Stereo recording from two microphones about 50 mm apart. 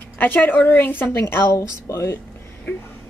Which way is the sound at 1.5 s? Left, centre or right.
Left.